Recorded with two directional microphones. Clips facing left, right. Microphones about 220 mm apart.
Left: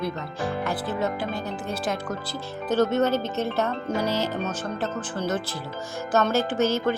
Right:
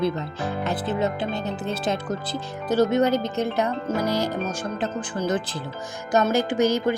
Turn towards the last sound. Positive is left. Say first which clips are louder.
# right 2 dB
turn(degrees=-15)  # may be behind; listen again after turning